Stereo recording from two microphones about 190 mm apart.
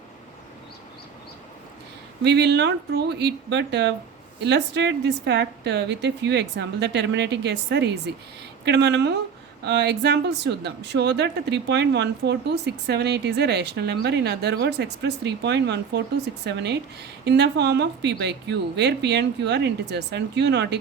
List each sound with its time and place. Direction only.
2.2 s speech: 60° right (ahead or behind)